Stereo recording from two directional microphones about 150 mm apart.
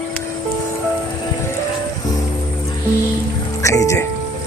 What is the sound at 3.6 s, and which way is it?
Music, 20° left (ahead or behind).